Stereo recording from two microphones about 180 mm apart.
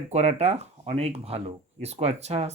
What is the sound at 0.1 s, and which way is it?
Speech, 40° right (ahead or behind).